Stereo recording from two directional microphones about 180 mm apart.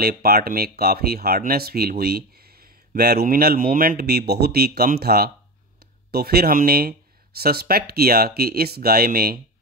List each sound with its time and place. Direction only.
0.0 s speech: 60° right (ahead or behind)